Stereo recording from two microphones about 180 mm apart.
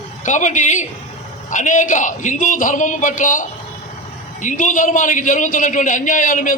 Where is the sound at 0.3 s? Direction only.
45° left (ahead or behind).